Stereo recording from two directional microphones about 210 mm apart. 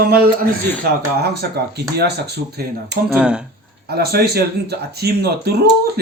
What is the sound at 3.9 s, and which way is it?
Speech, 50° right (ahead or behind).